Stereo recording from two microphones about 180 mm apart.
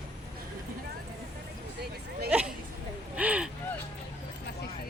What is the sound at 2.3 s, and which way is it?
Speech, 5° right (ahead or behind).